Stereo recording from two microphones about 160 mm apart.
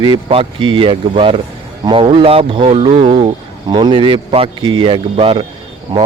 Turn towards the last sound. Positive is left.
turn(degrees=-30)  # may be behind; listen again after turning